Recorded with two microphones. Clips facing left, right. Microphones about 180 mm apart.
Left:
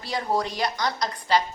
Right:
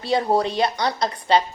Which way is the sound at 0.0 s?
25° right (ahead or behind).